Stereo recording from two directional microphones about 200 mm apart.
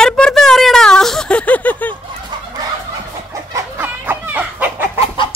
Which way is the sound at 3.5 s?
10° right (ahead or behind).